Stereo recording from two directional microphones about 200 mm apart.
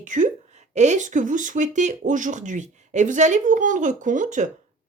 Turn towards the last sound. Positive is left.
turn(degrees=-40)  # may be behind; listen again after turning